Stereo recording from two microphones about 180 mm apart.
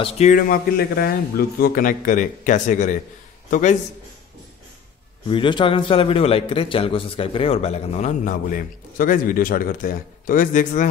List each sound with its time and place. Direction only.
0.3 s a man's voice: 50° left (ahead or behind)
5.3 s a man's voice: 25° left (ahead or behind); by 10.9 s 45° left (ahead or behind)